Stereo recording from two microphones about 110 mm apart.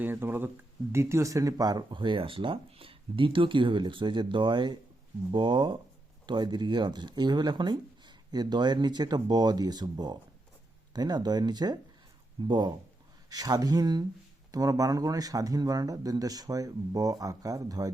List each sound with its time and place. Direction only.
0.0 s speech: 20° right (ahead or behind); by 17.9 s 35° right (ahead or behind)